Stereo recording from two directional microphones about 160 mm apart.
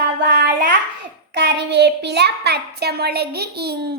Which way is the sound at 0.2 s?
90° right.